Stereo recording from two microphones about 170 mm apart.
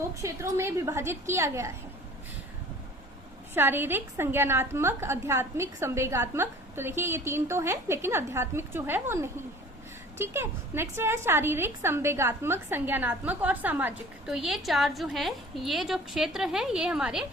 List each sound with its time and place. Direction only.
0.1 s a woman's voice: 20° right (ahead or behind)
3.5 s a woman's voice: 10° right (ahead or behind)